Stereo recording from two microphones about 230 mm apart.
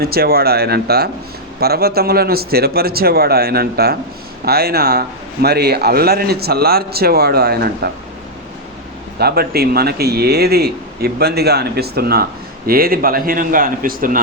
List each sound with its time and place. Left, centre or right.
0.0 s a man's voice: right
9.1 s a man's voice: right